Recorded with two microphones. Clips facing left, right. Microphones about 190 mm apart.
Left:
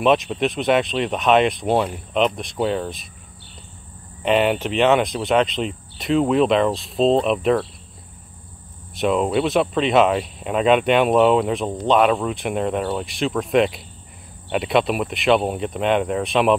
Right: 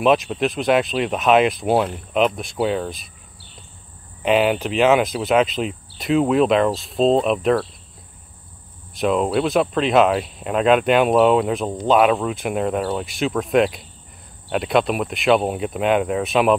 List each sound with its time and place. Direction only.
0.0 s speech: centre (ahead or behind)
4.2 s speech: centre (ahead or behind)
8.9 s speech: centre (ahead or behind)